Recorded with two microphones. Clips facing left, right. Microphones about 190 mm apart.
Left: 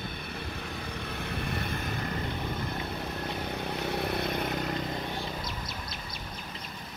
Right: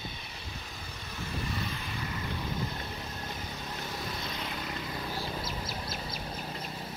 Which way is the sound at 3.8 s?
65° left (ahead or behind).